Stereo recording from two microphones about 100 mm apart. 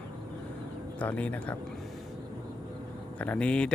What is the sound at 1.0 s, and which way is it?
Speech, 15° left (ahead or behind).